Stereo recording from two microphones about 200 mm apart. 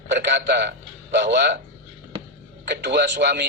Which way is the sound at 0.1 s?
55° right (ahead or behind).